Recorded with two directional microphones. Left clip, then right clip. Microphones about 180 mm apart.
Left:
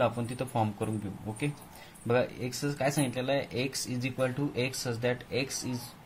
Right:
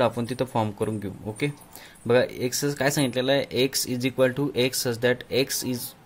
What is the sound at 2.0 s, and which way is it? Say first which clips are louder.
Speech: right 7 dB; 60° right (ahead or behind).